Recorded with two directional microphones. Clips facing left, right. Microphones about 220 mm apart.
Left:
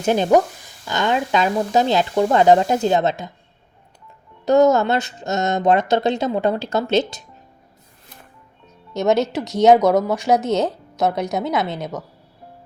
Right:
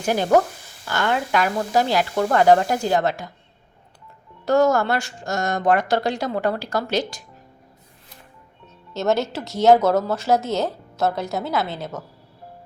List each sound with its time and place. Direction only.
0.0 s speech: 20° left (ahead or behind)
4.4 s speech: 20° left (ahead or behind)
8.9 s a woman's voice: 15° left (ahead or behind)